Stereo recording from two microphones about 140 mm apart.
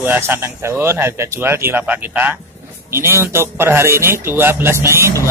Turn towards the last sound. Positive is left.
turn(degrees=-20)  # may be behind; listen again after turning